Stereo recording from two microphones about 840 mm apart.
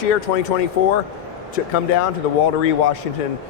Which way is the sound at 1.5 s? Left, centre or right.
Left.